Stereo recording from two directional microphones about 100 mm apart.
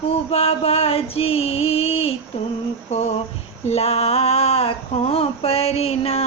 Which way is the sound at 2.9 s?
90° left.